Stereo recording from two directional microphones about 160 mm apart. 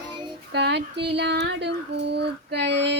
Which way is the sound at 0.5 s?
90° right.